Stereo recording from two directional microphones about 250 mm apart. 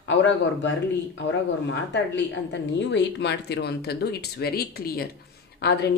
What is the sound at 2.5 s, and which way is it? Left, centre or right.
Speech, left.